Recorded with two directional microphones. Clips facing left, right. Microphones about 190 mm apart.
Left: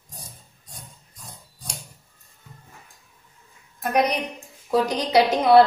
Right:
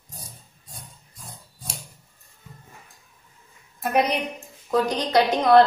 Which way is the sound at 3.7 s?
5° right (ahead or behind).